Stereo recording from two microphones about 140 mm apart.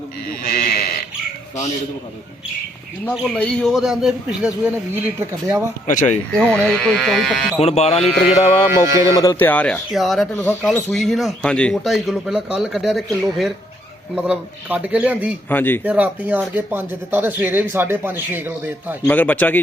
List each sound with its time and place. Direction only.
0.4 s sheep: 90° left
3.2 s speech: 5° left (ahead or behind)
5.2 s speech: 20° right (ahead or behind)
6.1 s speech: 10° left (ahead or behind)
7.6 s mantra: 50° left (ahead or behind)
9.0 s speech: 25° left (ahead or behind)
9.4 s a man's voice: 10° left (ahead or behind)
9.9 s speech: centre (ahead or behind)
15.4 s a man's voice: 15° left (ahead or behind)
15.8 s speech: 10° right (ahead or behind)
19.0 s a man's voice: 10° left (ahead or behind)